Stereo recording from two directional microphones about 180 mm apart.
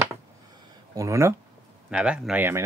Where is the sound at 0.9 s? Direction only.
15° right (ahead or behind).